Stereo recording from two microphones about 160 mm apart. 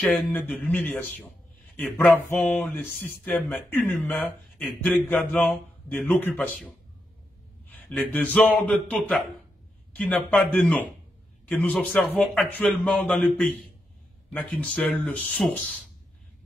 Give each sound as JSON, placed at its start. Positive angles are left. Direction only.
{"t": 0.0, "sound": "speech", "side_deg": 10}